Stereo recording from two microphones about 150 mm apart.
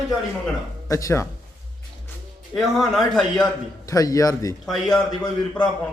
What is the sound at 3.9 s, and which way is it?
Speech, 20° left (ahead or behind).